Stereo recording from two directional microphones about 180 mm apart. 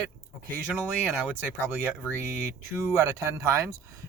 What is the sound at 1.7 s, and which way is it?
Speech, 10° right (ahead or behind).